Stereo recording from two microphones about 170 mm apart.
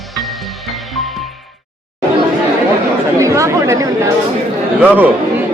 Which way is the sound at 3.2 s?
15° right (ahead or behind).